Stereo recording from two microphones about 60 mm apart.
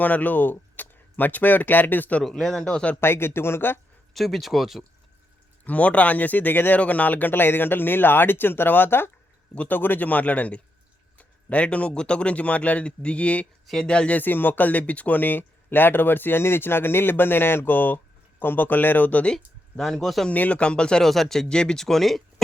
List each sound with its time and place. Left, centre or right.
0.0 s speech: left
2.2 s speech: centre
3.0 s speech: left
4.1 s speech: centre
5.6 s speech: left
14.2 s speech: left
19.3 s speech: centre
20.3 s speech: left
21.0 s speech: centre